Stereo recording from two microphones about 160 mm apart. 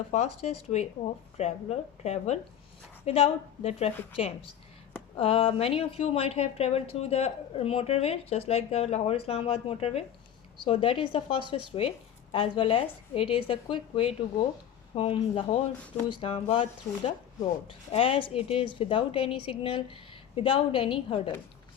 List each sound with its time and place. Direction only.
0.1 s speech: 45° left (ahead or behind)
5.1 s speech: 35° left (ahead or behind)